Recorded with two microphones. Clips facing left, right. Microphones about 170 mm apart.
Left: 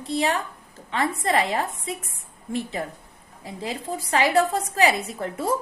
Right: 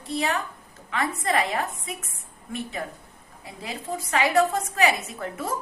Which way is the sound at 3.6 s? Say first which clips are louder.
Left 2 dB; 30° left (ahead or behind).